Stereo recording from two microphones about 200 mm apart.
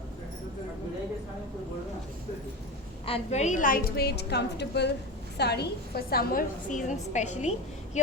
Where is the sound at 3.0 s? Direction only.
30° left (ahead or behind).